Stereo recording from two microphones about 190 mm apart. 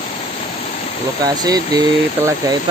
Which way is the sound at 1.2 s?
20° right (ahead or behind).